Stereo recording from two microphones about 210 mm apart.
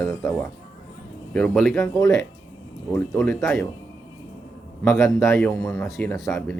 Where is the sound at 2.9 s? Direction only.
5° left (ahead or behind).